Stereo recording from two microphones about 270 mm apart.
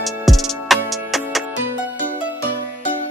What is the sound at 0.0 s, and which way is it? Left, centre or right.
Music, centre.